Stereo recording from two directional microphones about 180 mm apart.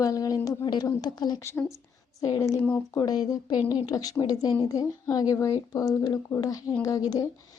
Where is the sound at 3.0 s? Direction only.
20° left (ahead or behind).